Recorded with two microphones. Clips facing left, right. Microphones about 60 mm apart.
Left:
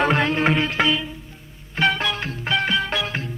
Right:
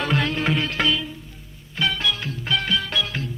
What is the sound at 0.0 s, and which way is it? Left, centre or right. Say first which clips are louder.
Music: left 4 dB; left.